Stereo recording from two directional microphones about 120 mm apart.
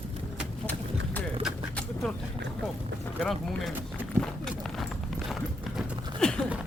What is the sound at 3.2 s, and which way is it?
Speech, centre (ahead or behind).